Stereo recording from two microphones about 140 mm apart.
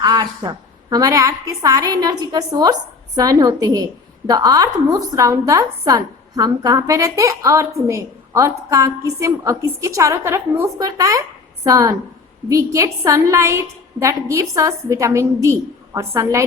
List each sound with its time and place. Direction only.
0.0 s a woman's voice: 30° right (ahead or behind)